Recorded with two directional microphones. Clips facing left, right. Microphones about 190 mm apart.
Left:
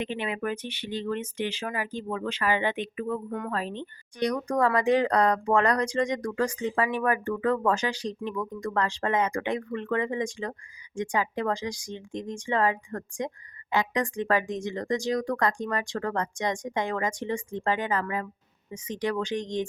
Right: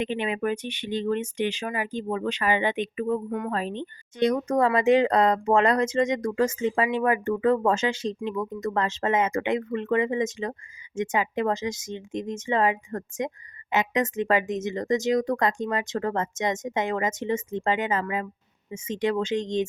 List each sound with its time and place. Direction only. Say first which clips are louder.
0.0 s speech: right 4 dB; 20° right (ahead or behind)